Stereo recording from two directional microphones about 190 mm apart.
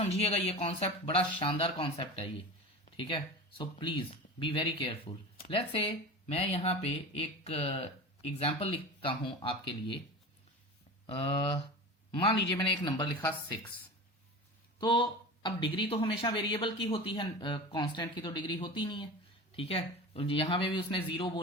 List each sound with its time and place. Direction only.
0.0 s speech: 30° left (ahead or behind)
3.6 s speech: 25° left (ahead or behind)
12.2 s speech: 25° left (ahead or behind)
14.8 s speech: 25° left (ahead or behind)